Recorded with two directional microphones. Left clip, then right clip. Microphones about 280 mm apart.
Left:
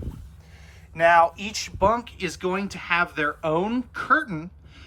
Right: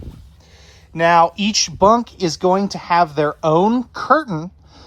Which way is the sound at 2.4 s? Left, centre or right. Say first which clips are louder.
Right 12 dB; centre.